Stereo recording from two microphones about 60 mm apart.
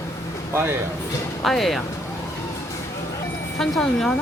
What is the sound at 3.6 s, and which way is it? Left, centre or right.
Speech, centre.